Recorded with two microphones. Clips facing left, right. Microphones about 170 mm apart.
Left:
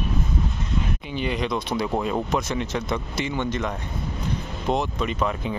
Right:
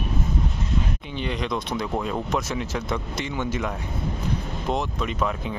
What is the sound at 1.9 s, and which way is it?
Speech, 10° left (ahead or behind).